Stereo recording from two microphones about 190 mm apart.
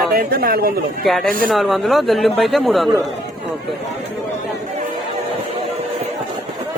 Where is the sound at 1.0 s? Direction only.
Centre (ahead or behind).